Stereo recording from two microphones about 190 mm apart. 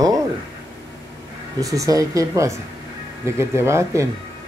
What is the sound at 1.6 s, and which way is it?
Speech, 15° right (ahead or behind).